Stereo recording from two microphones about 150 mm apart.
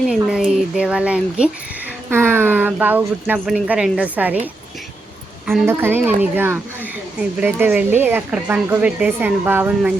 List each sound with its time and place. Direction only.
0.1 s speech: 5° right (ahead or behind)
5.6 s speech: 15° right (ahead or behind)